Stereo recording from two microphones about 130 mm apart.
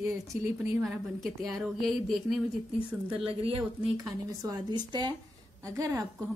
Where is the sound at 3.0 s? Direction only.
45° right (ahead or behind).